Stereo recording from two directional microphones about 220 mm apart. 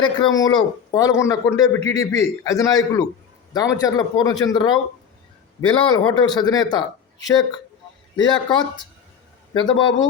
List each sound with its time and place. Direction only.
0.0 s a man's voice: 20° left (ahead or behind)